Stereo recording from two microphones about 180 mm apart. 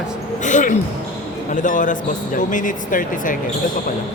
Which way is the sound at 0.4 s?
45° left (ahead or behind).